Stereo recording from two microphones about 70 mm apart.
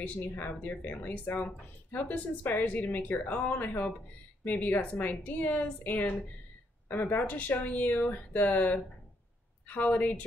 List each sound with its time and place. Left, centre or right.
0.0 s speech: left